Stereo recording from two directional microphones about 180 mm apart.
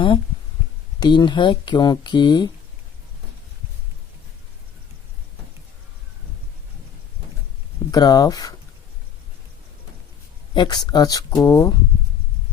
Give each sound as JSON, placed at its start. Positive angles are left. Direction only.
{"t": 0.9, "sound": "speech", "side_deg": 25}
{"t": 7.9, "sound": "speech", "side_deg": 20}
{"t": 10.5, "sound": "speech", "side_deg": 25}